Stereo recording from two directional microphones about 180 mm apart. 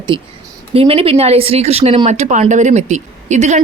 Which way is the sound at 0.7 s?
35° right (ahead or behind).